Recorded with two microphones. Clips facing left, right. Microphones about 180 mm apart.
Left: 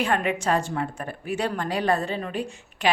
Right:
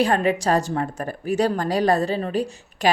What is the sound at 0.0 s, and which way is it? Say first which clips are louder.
A woman's voice: right 5 dB; 35° right (ahead or behind).